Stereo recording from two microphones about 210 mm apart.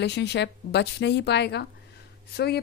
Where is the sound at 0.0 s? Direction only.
55° left (ahead or behind).